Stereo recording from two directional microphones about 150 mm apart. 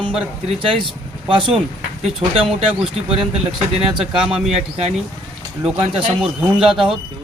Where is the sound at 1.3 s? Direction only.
35° right (ahead or behind).